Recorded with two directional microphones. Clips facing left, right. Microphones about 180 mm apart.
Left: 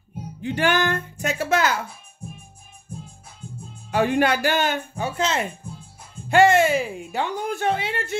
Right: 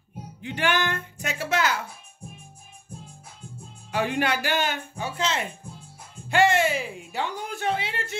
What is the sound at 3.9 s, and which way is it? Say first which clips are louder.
Speech: left 5 dB; 45° left (ahead or behind).